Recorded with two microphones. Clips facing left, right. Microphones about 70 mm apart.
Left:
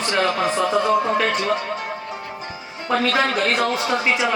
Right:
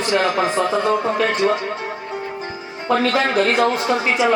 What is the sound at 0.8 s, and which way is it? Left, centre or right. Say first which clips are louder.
Speech: even; right.